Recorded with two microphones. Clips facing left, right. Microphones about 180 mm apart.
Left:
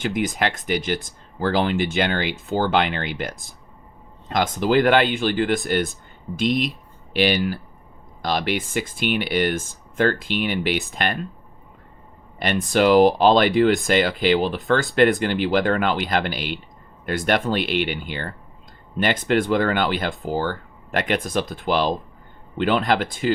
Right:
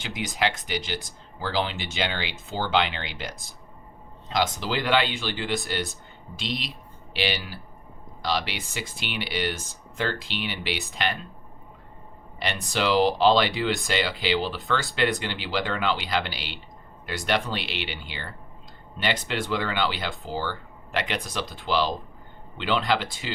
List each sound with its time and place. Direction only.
0.0 s speech: 50° left (ahead or behind)
12.4 s speech: 50° left (ahead or behind)